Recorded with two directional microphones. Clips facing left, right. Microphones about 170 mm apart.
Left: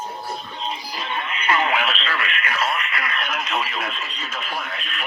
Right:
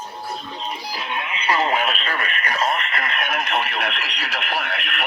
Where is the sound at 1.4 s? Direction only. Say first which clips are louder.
Right 1 dB; 30° right (ahead or behind).